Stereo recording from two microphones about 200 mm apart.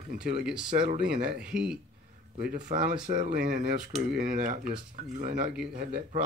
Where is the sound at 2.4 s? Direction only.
50° right (ahead or behind).